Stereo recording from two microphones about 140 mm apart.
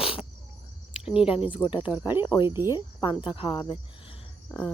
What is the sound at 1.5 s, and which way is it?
Speech, 40° left (ahead or behind).